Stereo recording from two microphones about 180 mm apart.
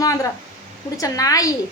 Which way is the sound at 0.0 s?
20° left (ahead or behind).